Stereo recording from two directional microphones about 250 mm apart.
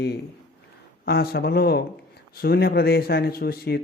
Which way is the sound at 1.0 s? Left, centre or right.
Left.